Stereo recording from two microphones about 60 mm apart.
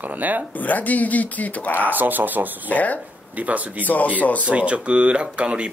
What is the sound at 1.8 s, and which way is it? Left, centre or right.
Speech, right.